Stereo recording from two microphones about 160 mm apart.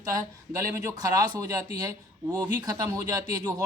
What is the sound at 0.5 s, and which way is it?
Speech, 20° right (ahead or behind).